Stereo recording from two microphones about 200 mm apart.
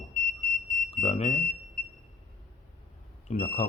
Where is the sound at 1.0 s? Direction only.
30° left (ahead or behind).